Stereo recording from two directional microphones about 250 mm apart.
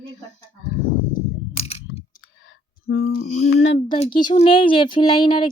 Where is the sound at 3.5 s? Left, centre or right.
Left.